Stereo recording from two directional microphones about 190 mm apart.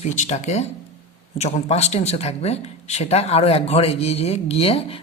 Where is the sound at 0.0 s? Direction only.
40° left (ahead or behind).